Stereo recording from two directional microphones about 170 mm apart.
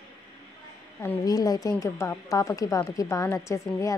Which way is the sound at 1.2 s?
20° left (ahead or behind).